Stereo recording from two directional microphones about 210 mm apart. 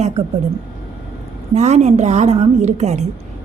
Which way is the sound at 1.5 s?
35° right (ahead or behind).